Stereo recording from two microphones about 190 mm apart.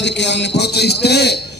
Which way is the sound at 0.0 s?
65° left (ahead or behind).